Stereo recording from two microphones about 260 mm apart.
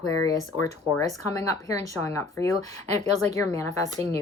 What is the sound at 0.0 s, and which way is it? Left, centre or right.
Speech, left.